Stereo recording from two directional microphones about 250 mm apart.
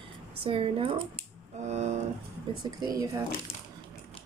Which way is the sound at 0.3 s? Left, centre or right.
Right.